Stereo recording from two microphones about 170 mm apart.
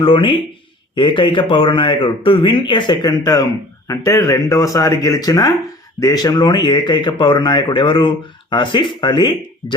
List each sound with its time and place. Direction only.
0.0 s speech: 30° left (ahead or behind)